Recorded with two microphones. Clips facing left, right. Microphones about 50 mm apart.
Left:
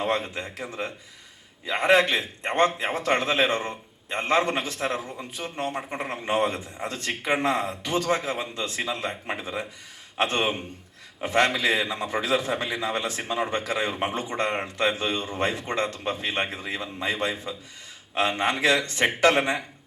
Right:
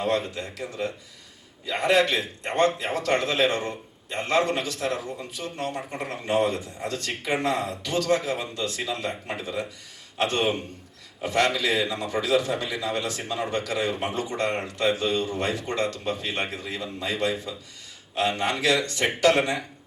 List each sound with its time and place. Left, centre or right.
0.0 s a man's voice: left